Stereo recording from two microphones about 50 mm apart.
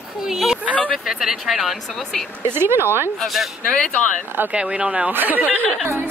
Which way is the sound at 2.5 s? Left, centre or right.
Right.